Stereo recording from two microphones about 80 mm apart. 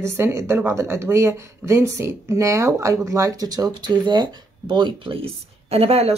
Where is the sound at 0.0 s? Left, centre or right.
Right.